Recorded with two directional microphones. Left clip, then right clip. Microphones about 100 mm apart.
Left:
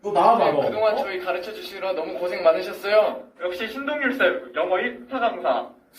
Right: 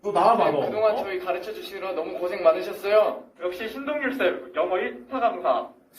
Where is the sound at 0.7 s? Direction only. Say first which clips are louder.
Left 2 dB; 35° right (ahead or behind).